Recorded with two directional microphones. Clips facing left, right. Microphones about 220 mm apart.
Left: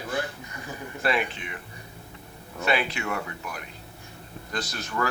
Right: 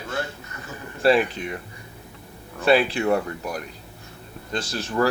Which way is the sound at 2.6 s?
35° right (ahead or behind).